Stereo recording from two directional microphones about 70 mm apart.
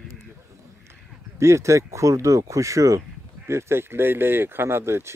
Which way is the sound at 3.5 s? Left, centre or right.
Right.